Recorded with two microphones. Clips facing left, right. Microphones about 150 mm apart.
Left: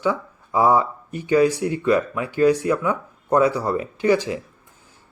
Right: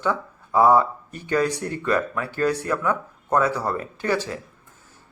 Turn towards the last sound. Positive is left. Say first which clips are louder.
# left 6 dB
turn(degrees=15)  # may be behind; listen again after turning